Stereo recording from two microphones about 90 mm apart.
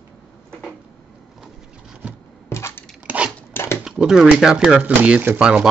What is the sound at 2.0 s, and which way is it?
Rub, 15° right (ahead or behind).